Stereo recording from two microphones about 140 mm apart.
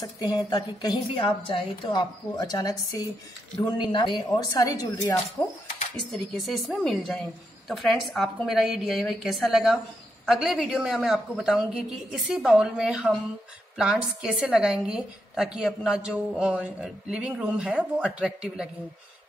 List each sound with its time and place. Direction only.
0.0 s a woman's voice: 30° left (ahead or behind)
6.1 s a woman's voice: centre (ahead or behind)